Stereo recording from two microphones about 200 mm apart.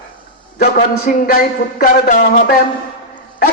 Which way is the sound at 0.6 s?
45° left (ahead or behind).